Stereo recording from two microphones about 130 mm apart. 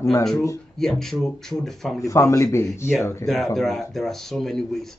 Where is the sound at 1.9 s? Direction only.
25° left (ahead or behind).